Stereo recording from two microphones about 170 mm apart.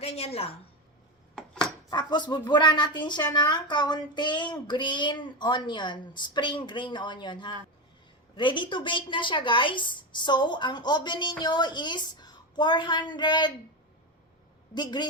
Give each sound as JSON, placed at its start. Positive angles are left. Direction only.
{"t": 0.0, "sound": "a woman's voice", "side_deg": 35}
{"t": 1.4, "sound": "chopping", "side_deg": 0}
{"t": 1.9, "sound": "speech", "side_deg": 25}
{"t": 14.8, "sound": "speech", "side_deg": 25}